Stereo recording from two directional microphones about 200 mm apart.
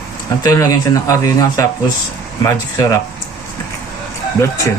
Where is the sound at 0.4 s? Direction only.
15° left (ahead or behind).